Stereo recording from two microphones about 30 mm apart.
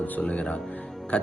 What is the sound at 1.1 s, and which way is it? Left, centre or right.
Speech, left.